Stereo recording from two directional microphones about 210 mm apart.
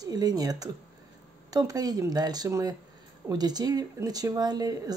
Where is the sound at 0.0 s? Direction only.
20° right (ahead or behind).